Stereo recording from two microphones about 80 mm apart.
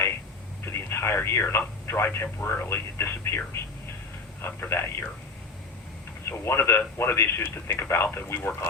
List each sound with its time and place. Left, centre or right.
0.6 s speech: left
4.6 s speech: left
6.2 s speech: left